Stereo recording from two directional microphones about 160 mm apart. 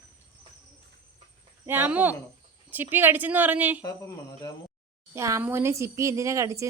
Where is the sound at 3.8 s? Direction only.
20° left (ahead or behind).